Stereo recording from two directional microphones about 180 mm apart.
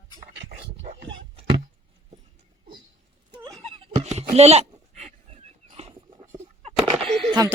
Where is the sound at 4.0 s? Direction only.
35° right (ahead or behind).